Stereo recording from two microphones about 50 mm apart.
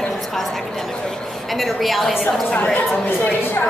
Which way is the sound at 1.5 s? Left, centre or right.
Centre.